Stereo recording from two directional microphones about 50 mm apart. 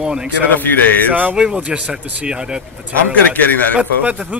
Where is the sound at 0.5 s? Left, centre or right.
Left.